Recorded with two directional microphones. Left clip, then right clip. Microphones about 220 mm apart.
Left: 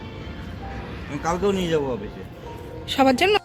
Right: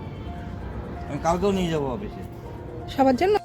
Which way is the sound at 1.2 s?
40° right (ahead or behind).